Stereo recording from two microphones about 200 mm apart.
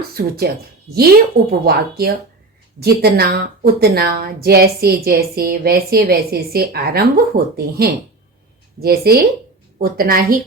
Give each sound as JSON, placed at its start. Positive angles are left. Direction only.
{"t": 0.1, "sound": "a woman's voice", "side_deg": -50}